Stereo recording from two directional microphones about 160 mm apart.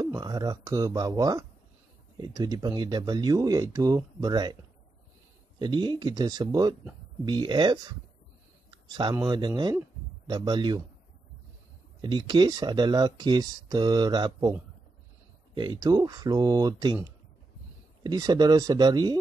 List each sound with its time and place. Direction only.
0.0 s speech: 25° right (ahead or behind)
5.6 s speech: 30° right (ahead or behind)
8.6 s a sound: 25° right (ahead or behind)
9.1 s speech: 25° right (ahead or behind)
12.0 s speech: 25° right (ahead or behind)
15.5 s speech: 25° right (ahead or behind)